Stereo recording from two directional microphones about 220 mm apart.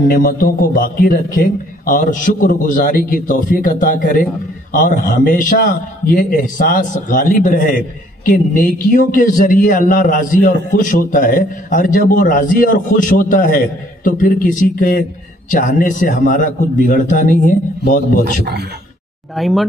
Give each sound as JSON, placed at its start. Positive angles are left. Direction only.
{"t": 0.1, "sound": "a man's voice", "side_deg": 40}
{"t": 18.2, "sound": "a man's voice", "side_deg": -45}
{"t": 19.3, "sound": "speech", "side_deg": 0}